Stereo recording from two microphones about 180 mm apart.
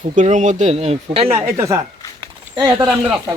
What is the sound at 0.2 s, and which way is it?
Speech, 40° right (ahead or behind).